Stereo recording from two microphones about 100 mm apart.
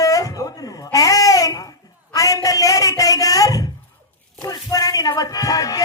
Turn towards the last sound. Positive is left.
turn(degrees=35)  # may be behind; listen again after turning